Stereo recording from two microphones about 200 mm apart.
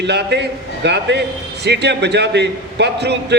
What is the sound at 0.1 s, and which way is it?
A man's voice, 55° right (ahead or behind).